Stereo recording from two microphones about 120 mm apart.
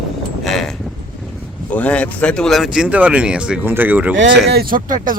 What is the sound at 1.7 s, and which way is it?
Speech, 10° left (ahead or behind).